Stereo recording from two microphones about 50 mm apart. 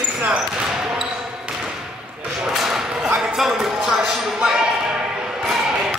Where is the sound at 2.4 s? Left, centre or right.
Centre.